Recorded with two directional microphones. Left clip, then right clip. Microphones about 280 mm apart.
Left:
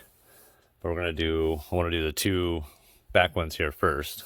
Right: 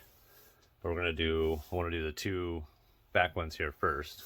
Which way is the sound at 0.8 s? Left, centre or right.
Left.